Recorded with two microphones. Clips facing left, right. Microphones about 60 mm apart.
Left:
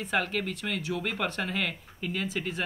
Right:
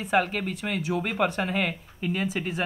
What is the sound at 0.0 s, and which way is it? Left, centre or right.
Speech, centre.